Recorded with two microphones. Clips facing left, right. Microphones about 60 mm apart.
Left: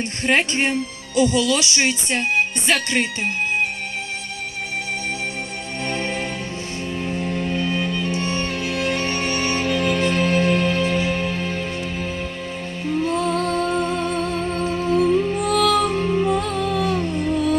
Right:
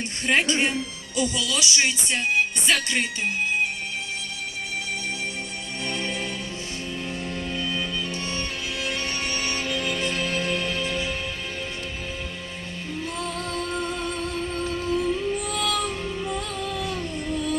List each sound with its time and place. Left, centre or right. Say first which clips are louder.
0.3 s speech: left 3 dB; left
7.5 s music: left 4 dB; left
12.8 s music: left 11 dB; left